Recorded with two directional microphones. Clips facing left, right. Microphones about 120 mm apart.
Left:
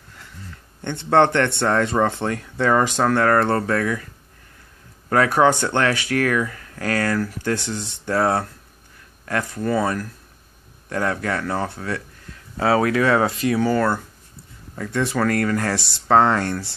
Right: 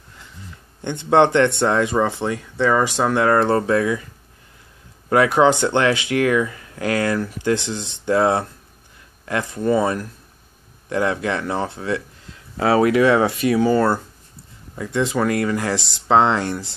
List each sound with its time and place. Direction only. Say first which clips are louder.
0.8 s speech: right 1 dB; 15° right (ahead or behind)
3.0 s speech: right 1 dB; 15° right (ahead or behind)
5.1 s speech: right 2 dB; 15° right (ahead or behind)